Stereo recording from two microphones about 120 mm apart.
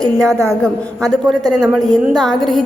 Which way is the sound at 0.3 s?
25° right (ahead or behind).